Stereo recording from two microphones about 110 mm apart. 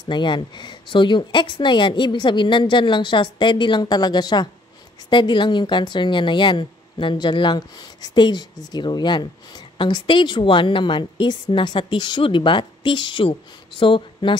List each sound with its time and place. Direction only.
0.1 s speech: 45° left (ahead or behind)